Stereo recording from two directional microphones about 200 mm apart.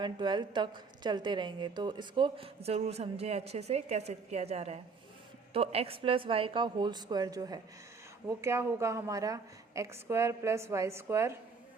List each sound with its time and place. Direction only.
0.0 s a woman's voice: 25° right (ahead or behind)